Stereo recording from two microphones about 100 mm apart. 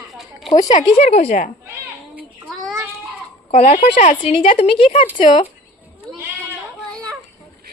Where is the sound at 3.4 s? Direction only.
85° left; by 5.5 s 70° left (ahead or behind).